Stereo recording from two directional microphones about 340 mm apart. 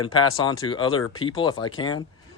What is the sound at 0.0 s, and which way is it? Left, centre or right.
Speech, centre.